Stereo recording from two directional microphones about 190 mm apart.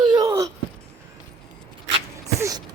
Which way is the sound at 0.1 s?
20° right (ahead or behind).